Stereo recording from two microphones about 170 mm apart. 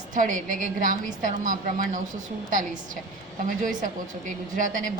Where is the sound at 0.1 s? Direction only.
50° right (ahead or behind).